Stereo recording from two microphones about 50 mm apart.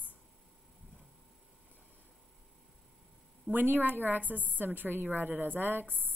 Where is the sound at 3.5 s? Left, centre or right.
Right.